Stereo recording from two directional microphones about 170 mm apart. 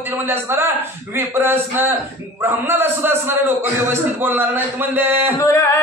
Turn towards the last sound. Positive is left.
turn(degrees=20)  # may be behind; listen again after turning